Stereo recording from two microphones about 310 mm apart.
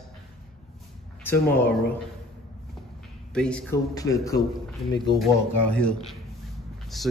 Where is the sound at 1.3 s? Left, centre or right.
Centre.